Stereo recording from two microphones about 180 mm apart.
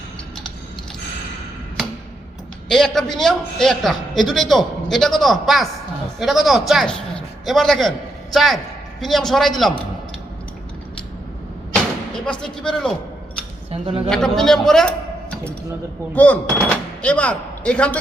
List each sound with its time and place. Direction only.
2.6 s a man's voice: centre (ahead or behind)
11.7 s door: 5° left (ahead or behind)
13.7 s speech: 30° right (ahead or behind)
14.1 s a man's voice: 5° left (ahead or behind)